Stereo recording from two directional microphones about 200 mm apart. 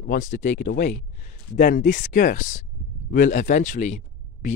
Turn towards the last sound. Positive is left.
turn(degrees=35)  # may be behind; listen again after turning